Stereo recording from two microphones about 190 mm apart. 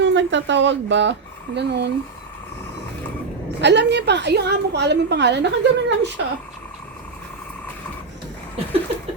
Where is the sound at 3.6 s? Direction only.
65° right (ahead or behind).